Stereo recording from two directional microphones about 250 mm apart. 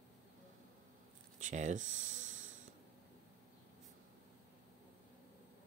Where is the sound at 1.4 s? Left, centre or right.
Right.